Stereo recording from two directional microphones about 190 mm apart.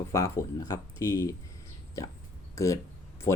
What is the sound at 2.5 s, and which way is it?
Speech, 15° left (ahead or behind).